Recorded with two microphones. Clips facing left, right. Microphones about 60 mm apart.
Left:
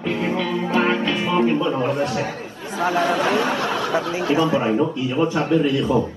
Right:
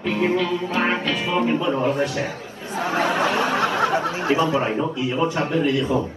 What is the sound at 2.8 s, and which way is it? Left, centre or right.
Speech, right.